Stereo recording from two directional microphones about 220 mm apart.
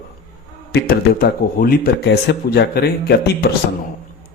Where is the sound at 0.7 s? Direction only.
45° left (ahead or behind).